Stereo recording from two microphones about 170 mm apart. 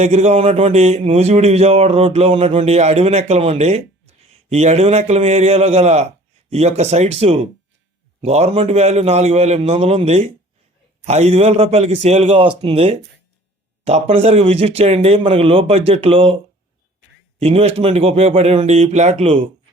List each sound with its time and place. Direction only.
0.0 s a man's voice: 40° right (ahead or behind)
17.4 s a man's voice: 35° right (ahead or behind)